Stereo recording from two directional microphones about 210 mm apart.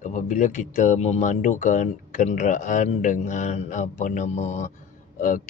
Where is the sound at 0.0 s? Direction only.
35° left (ahead or behind).